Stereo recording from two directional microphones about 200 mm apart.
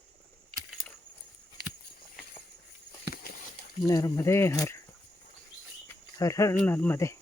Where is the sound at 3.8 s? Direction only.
15° left (ahead or behind).